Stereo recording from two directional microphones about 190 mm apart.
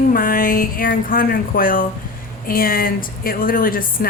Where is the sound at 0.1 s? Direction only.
50° left (ahead or behind).